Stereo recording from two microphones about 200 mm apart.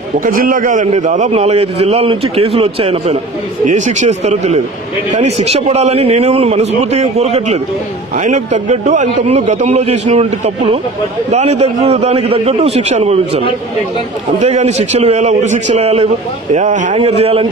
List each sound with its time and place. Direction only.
0.2 s a man's voice: 45° right (ahead or behind)
14.4 s a man's voice: 35° right (ahead or behind)